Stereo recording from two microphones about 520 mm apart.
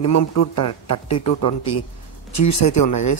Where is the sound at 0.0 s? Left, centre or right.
Left.